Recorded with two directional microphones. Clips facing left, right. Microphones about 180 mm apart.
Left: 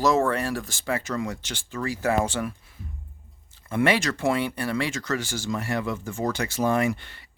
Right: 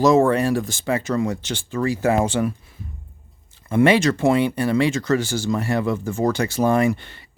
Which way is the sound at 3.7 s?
25° right (ahead or behind).